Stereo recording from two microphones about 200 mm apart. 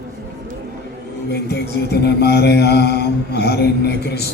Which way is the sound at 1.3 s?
55° left (ahead or behind).